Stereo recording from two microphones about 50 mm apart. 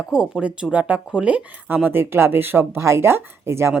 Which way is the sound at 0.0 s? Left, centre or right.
Centre.